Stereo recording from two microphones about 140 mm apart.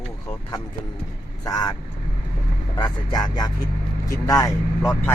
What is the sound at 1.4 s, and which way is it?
Speech, 30° left (ahead or behind).